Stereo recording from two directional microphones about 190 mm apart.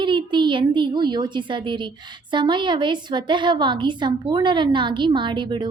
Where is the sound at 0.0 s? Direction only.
25° right (ahead or behind).